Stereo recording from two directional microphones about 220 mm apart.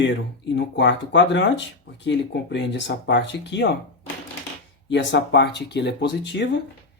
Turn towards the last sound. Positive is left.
turn(degrees=50)  # may be behind; listen again after turning